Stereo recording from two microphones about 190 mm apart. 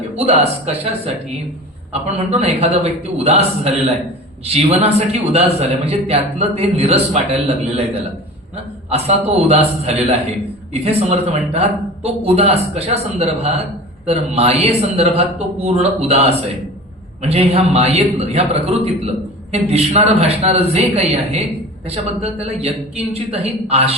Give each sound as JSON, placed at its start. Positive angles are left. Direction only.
{"t": 0.2, "sound": "a man's voice", "side_deg": -35}